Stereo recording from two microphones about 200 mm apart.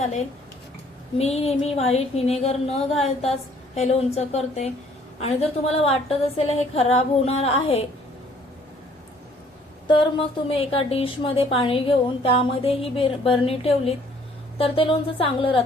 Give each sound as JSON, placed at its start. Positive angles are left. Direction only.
{"t": 0.0, "sound": "a woman's voice", "side_deg": 35}
{"t": 9.8, "sound": "a woman's voice", "side_deg": 25}